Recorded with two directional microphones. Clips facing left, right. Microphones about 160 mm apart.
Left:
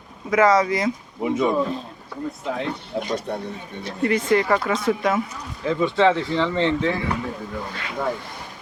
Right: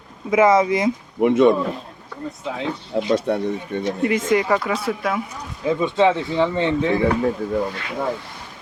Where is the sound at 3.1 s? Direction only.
90° right.